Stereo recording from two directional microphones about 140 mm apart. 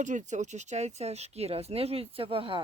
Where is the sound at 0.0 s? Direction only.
60° right (ahead or behind).